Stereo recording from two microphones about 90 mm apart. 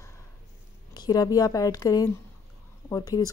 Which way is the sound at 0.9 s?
45° left (ahead or behind).